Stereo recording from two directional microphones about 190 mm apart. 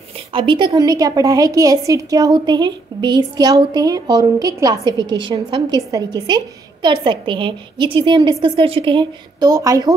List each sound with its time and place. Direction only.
0.3 s a woman's voice: 25° right (ahead or behind)